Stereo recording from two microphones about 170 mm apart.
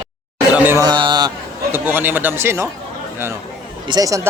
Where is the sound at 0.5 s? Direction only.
10° right (ahead or behind).